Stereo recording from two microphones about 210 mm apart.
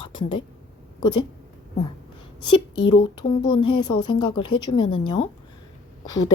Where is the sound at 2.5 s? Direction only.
20° left (ahead or behind).